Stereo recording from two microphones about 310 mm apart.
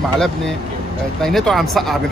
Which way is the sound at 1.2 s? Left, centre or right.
Centre.